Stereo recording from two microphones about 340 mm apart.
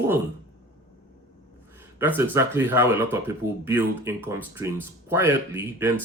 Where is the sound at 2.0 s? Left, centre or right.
Centre.